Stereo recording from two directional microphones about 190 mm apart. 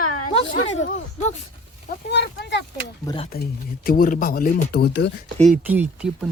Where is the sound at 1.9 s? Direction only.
60° left (ahead or behind).